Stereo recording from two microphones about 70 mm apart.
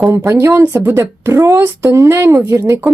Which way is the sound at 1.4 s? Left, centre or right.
Right.